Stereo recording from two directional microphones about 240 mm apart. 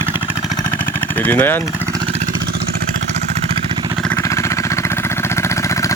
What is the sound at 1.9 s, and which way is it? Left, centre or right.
Vehicle, right.